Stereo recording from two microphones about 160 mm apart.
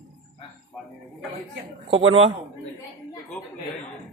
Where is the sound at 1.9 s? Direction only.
35° right (ahead or behind).